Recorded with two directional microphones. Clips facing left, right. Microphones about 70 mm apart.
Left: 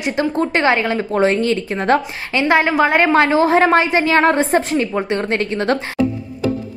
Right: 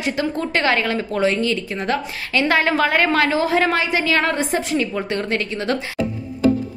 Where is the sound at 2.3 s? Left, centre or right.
Left.